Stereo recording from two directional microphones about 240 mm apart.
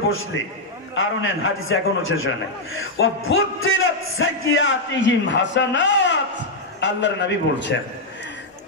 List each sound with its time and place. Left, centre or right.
0.9 s a man's voice: left